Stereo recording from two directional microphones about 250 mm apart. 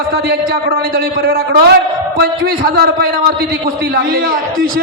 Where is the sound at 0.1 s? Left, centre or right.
Right.